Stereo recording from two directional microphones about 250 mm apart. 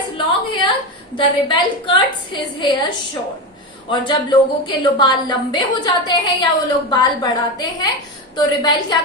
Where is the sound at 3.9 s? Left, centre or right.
Centre.